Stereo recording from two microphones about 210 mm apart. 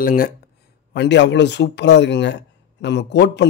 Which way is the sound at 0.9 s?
55° left (ahead or behind).